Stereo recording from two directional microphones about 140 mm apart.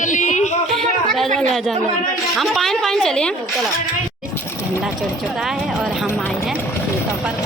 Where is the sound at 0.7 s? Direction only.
Centre (ahead or behind).